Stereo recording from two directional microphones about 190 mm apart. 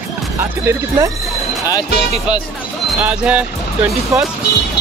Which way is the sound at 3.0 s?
5° right (ahead or behind).